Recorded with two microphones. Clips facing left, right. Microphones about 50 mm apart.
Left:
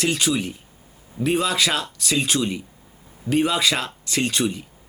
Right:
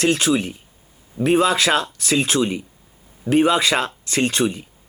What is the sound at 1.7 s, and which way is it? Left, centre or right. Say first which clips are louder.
Speech: right 5 dB; right.